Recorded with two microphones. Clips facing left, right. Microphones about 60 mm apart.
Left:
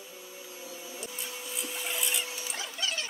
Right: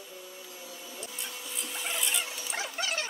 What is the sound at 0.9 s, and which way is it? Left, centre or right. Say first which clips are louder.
Printer: even; centre.